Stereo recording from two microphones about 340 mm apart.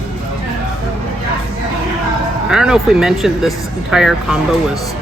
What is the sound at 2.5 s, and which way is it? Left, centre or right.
Speech, centre.